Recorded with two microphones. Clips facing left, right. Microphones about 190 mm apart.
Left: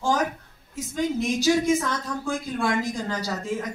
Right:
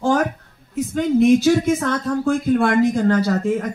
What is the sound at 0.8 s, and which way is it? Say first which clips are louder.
Speech: right 9 dB; 60° right (ahead or behind).